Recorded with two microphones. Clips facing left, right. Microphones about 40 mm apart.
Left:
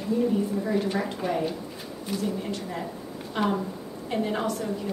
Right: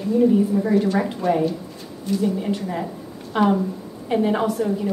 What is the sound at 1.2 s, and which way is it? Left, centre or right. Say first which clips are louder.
Speech: right 8 dB; centre.